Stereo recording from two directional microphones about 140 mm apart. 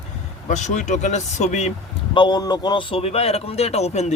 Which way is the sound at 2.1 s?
30° left (ahead or behind).